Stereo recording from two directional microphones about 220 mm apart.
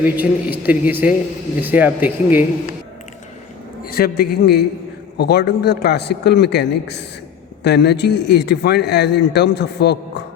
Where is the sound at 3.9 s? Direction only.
45° left (ahead or behind).